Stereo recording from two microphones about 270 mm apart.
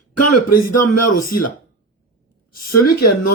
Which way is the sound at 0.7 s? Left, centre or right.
Left.